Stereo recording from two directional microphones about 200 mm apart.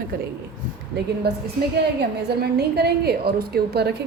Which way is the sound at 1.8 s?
55° right (ahead or behind).